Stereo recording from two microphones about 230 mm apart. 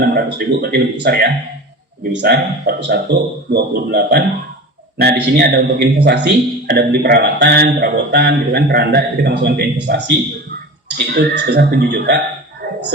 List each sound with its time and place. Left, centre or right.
0.0 s a man's voice: right